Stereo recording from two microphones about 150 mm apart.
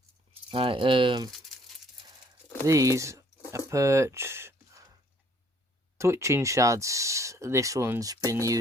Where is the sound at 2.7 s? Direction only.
20° right (ahead or behind).